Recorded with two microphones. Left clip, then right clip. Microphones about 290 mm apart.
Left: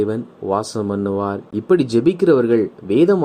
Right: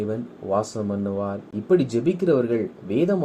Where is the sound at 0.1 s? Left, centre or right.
Left.